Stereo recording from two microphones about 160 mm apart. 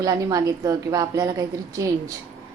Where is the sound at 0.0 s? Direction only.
25° right (ahead or behind).